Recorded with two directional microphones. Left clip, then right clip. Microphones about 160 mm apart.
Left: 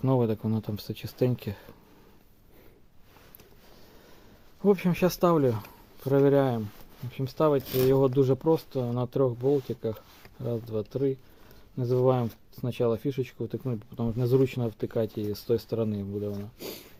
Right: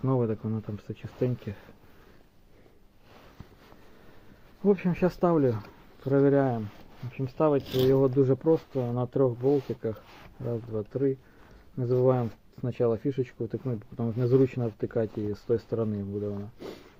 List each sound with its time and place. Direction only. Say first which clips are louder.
0.0 s speech: left 2 dB; 40° left (ahead or behind)
0.9 s speech: left 2 dB; 70° left (ahead or behind)
4.6 s speech: left 1 dB; 35° left (ahead or behind)